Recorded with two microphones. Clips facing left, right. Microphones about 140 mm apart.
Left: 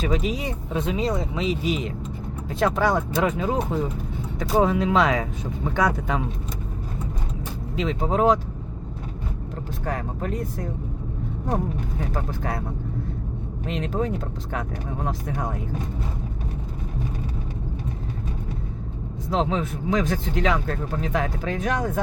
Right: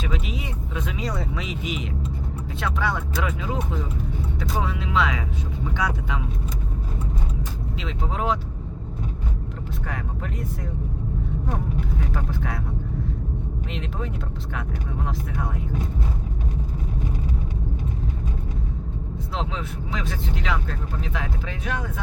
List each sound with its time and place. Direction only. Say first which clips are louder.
0.0 s speech: left 6 dB; 40° left (ahead or behind)
7.8 s speech: left 8 dB; 45° left (ahead or behind)
9.8 s speech: left 6 dB; 35° left (ahead or behind)
12.1 s speech: left 1 dB; 40° left (ahead or behind)
13.7 s speech: left 9 dB; 40° left (ahead or behind)
19.3 s speech: left 8 dB; 45° left (ahead or behind)